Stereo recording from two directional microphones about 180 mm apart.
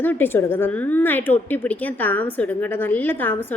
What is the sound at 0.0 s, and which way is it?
A woman's voice, 10° left (ahead or behind).